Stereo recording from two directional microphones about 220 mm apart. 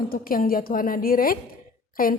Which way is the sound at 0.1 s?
40° left (ahead or behind).